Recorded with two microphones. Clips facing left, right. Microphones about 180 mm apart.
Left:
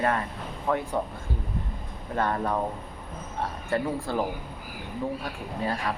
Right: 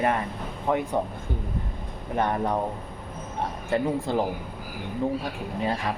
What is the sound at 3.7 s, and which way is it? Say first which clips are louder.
Speech: right 3 dB; 20° right (ahead or behind).